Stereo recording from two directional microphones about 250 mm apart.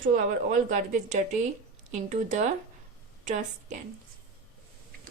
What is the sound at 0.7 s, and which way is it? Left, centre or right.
Speech, right.